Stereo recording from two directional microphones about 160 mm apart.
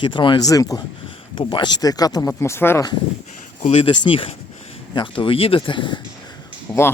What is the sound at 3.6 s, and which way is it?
Speech, 35° left (ahead or behind).